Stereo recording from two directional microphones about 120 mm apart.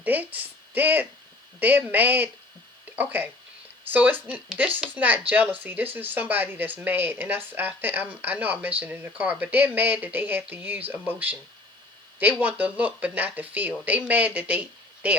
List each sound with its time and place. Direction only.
0.0 s speech: 15° right (ahead or behind)